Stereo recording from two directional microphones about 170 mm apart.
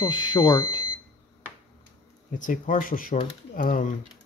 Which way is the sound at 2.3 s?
50° left (ahead or behind).